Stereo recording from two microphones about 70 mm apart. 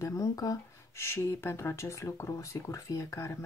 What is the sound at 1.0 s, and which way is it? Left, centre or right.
Speech, left.